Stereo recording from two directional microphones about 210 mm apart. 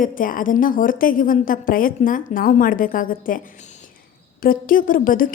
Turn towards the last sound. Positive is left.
turn(degrees=40)  # may be behind; listen again after turning